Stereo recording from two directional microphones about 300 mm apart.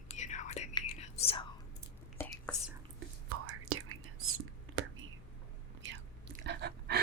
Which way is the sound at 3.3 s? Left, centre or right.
Right.